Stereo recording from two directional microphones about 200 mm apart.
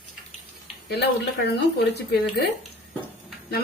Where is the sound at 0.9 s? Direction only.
55° left (ahead or behind).